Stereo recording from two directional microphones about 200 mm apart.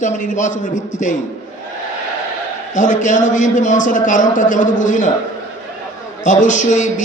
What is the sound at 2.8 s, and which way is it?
A man's voice, 40° left (ahead or behind).